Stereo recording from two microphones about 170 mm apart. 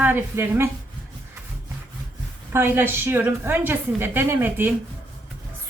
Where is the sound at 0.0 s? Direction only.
10° right (ahead or behind).